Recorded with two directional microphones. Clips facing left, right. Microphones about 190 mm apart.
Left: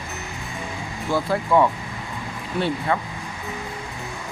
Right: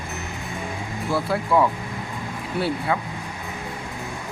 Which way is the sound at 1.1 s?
Centre (ahead or behind).